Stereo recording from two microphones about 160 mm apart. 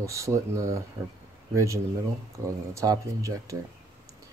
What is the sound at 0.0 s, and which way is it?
Speech, 20° right (ahead or behind).